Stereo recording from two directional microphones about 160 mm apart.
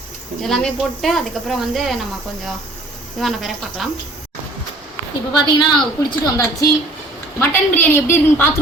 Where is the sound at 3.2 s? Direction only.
Centre (ahead or behind).